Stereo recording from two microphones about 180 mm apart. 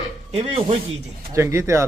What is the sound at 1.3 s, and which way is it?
Speech, 15° right (ahead or behind).